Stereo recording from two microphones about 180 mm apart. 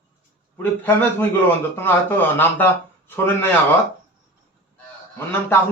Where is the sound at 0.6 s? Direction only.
10° left (ahead or behind).